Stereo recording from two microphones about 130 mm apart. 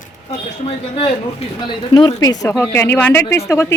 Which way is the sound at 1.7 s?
35° left (ahead or behind).